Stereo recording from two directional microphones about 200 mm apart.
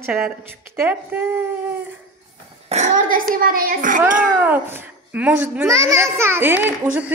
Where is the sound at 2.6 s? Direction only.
35° right (ahead or behind).